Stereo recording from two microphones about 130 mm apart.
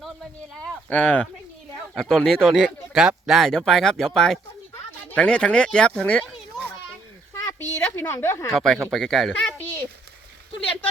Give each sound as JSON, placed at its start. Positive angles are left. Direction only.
{"t": 0.6, "sound": "a sound", "side_deg": 10}
{"t": 2.0, "sound": "speech", "side_deg": 0}
{"t": 7.4, "sound": "a woman's voice", "side_deg": 20}
{"t": 8.4, "sound": "speech", "side_deg": 5}